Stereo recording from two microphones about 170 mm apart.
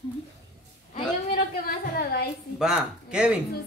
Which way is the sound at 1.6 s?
65° left (ahead or behind).